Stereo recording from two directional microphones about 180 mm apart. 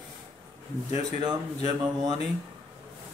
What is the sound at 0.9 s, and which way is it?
Speech, 20° right (ahead or behind).